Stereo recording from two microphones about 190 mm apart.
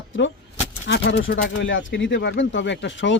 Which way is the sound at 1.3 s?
60° left (ahead or behind).